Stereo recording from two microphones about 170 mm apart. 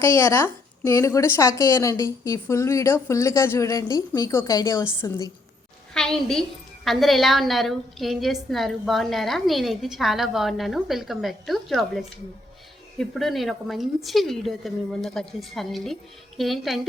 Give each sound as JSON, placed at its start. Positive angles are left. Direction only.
{"t": 0.0, "sound": "speech", "side_deg": 15}
{"t": 5.9, "sound": "a woman's voice", "side_deg": 5}